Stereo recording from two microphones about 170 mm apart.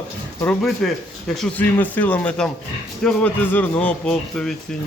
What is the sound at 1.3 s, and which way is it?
A man's voice, 5° left (ahead or behind).